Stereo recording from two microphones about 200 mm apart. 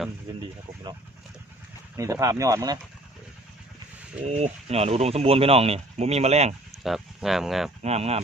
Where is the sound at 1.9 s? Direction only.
15° right (ahead or behind).